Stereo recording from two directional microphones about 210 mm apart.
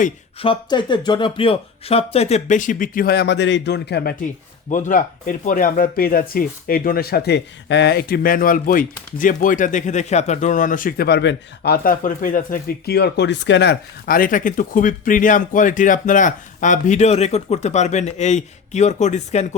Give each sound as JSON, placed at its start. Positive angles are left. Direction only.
{"t": 0.0, "sound": "speech", "side_deg": 25}
{"t": 4.7, "sound": "speech", "side_deg": 40}